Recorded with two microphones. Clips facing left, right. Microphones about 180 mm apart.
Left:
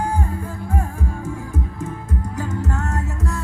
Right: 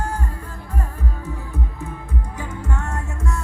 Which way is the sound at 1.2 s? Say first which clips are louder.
Left 3 dB; 45° left (ahead or behind).